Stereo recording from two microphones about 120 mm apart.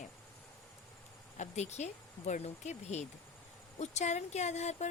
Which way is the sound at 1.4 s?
70° left (ahead or behind).